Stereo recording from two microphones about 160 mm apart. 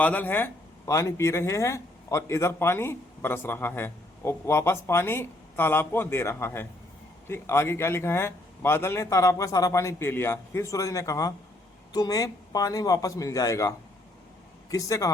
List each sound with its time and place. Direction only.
0.0 s a man's voice: 10° left (ahead or behind)